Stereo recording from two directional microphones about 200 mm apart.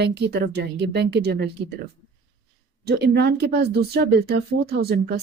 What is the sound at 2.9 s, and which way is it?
Speech, 55° right (ahead or behind).